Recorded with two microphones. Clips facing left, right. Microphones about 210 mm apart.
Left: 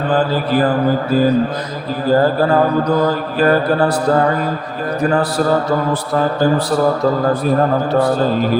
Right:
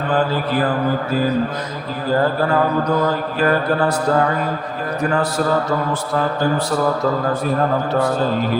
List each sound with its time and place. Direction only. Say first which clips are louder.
3.3 s speech: left 5 dB; 35° left (ahead or behind)